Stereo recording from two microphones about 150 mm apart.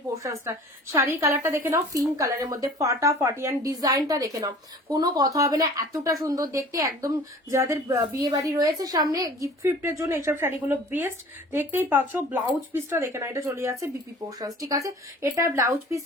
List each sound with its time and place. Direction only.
0.5 s speech: 15° right (ahead or behind)